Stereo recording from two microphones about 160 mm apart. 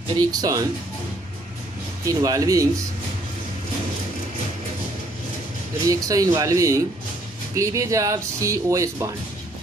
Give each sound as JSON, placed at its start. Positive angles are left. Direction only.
{"t": 0.2, "sound": "speech", "side_deg": -25}
{"t": 2.0, "sound": "speech", "side_deg": -20}
{"t": 6.0, "sound": "speech", "side_deg": -20}